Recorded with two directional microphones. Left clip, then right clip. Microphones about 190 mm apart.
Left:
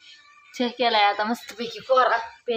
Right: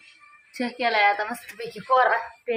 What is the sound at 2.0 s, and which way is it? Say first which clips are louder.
Speech: even; 5° left (ahead or behind).